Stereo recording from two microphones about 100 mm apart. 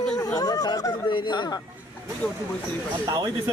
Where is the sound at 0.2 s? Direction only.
40° left (ahead or behind).